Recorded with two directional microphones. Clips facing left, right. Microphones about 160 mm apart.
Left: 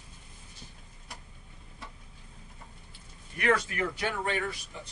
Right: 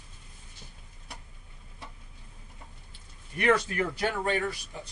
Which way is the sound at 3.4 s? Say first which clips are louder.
Right 2 dB; 35° right (ahead or behind).